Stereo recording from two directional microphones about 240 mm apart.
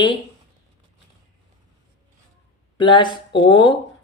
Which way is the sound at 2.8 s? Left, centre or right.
Centre.